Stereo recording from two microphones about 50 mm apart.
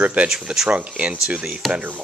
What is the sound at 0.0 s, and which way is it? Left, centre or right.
Speech, right.